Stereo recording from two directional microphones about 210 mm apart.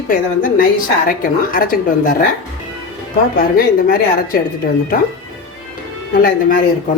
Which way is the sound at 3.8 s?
45° left (ahead or behind).